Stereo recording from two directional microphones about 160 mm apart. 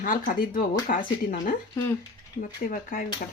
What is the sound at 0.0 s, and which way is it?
Speech, 60° left (ahead or behind).